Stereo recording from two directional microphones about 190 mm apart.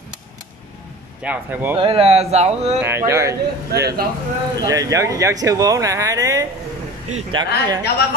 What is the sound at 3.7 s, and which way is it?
Speech, 55° right (ahead or behind).